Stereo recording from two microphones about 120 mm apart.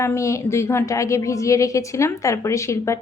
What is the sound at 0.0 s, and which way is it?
A woman's voice, 20° left (ahead or behind).